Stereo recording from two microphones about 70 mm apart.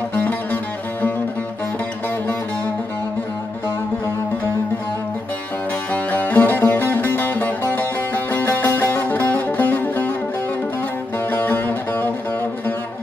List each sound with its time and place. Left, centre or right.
0.1 s music: left
6.1 s music: left
11.3 s music: left